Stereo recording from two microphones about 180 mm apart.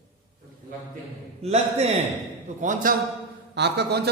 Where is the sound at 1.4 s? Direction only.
35° right (ahead or behind).